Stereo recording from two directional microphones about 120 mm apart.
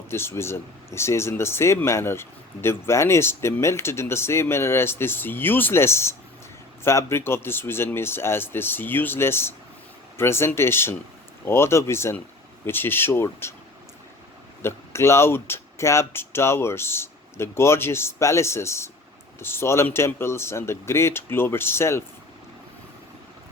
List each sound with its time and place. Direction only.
0.1 s speech: 20° left (ahead or behind)
14.6 s speech: 20° left (ahead or behind)